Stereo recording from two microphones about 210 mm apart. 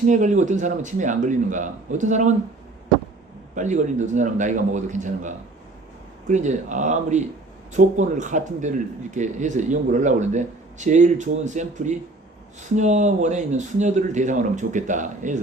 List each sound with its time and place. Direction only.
0.1 s a man's voice: 35° right (ahead or behind)
3.5 s a man's voice: 35° right (ahead or behind)